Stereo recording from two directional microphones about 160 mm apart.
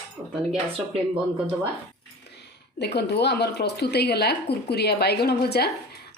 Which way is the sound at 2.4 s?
90° left.